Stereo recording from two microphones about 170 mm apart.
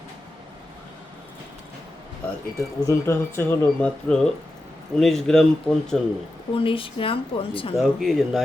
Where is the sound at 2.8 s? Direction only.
15° left (ahead or behind).